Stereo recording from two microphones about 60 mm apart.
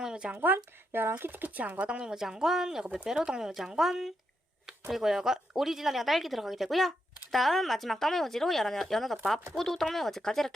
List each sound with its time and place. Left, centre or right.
0.0 s a sound: centre
0.3 s speech: right
2.0 s speech: centre